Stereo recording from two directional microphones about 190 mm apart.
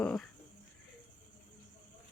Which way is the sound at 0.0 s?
Centre (ahead or behind).